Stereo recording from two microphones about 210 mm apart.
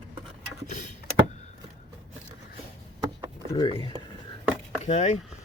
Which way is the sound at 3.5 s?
25° left (ahead or behind).